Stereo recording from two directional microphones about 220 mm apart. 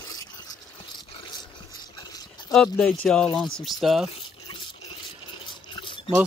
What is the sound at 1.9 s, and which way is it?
Horse, 20° left (ahead or behind).